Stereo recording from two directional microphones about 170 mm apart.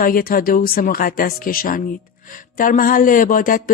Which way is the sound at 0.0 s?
55° left (ahead or behind).